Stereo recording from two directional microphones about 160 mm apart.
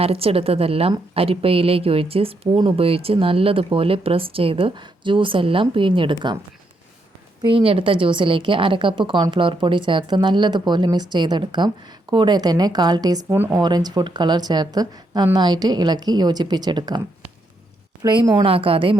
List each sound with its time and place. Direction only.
0.0 s a woman's voice: 35° right (ahead or behind)
7.4 s a woman's voice: 35° right (ahead or behind)